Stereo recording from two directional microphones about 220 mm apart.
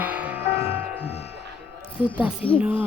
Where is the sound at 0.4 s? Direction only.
25° left (ahead or behind).